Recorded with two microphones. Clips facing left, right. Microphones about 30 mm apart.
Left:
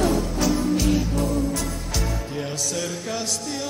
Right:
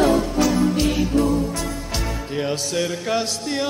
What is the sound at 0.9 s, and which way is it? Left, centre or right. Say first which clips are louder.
Music: right 4 dB; right.